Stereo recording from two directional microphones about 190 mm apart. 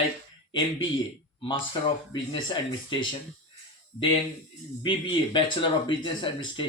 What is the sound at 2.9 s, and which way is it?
Speech, 25° left (ahead or behind).